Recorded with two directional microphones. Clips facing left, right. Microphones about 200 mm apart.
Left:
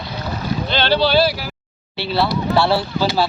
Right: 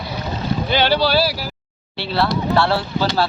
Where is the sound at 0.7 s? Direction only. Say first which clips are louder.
Left 1 dB; 10° right (ahead or behind); by 3.3 s 5° left (ahead or behind).